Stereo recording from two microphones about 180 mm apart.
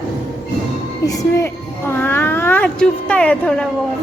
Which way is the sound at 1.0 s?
20° left (ahead or behind).